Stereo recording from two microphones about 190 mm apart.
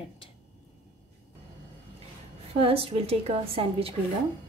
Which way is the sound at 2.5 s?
30° right (ahead or behind).